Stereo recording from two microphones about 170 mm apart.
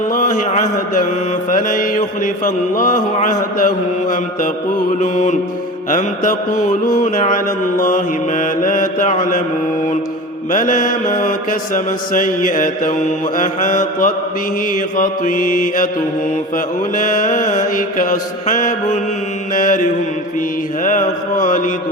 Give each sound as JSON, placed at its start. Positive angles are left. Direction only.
{"t": 0.1, "sound": "mantra", "side_deg": 50}
{"t": 10.5, "sound": "mantra", "side_deg": 50}